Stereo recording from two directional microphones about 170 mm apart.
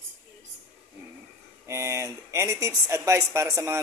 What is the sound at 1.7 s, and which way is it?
Speech, 15° right (ahead or behind).